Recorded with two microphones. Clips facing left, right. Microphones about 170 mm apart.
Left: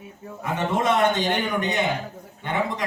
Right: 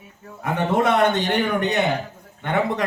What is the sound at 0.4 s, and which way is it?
A man's voice, 60° right (ahead or behind).